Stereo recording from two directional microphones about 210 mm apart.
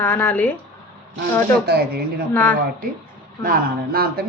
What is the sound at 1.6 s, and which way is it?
Speech, 45° right (ahead or behind).